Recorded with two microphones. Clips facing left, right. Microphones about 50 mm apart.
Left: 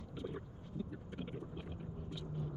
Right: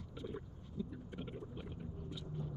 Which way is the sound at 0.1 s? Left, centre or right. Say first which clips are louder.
Left 2 dB; left.